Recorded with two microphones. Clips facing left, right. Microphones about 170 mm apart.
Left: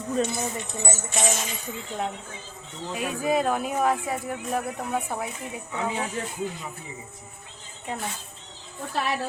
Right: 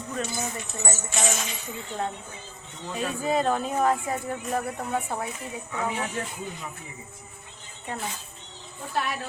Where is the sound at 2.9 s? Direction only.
10° left (ahead or behind).